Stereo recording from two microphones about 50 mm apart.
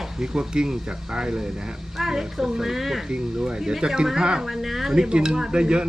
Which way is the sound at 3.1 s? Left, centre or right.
Centre.